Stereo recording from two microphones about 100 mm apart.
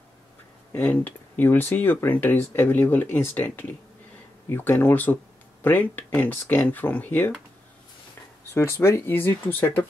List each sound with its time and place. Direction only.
0.7 s speech: 15° left (ahead or behind)
8.5 s speech: 25° left (ahead or behind)